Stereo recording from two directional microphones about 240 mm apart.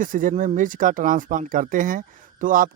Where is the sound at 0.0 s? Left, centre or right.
Right.